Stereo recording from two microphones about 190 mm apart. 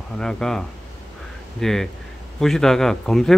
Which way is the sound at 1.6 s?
Centre (ahead or behind).